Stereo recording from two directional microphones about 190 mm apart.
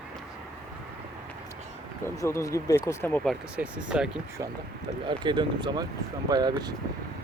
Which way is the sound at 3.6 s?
5° right (ahead or behind).